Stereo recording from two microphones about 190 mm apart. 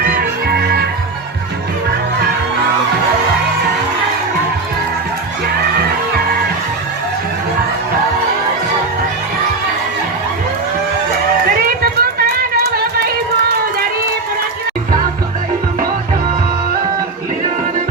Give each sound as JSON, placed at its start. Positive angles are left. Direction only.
{"t": 0.0, "sound": "music", "side_deg": -50}
{"t": 11.8, "sound": "a sound", "side_deg": -55}
{"t": 12.7, "sound": "music", "side_deg": -55}